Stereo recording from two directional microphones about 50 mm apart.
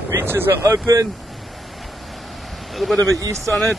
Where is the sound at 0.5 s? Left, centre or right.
Right.